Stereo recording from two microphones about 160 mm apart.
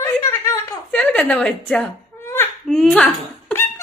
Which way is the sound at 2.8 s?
5° left (ahead or behind).